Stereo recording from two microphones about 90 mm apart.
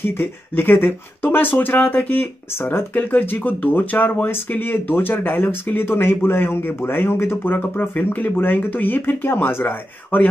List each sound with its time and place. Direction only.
0.0 s speech: 25° left (ahead or behind)